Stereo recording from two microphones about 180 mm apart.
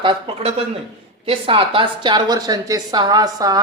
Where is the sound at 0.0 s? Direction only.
30° right (ahead or behind).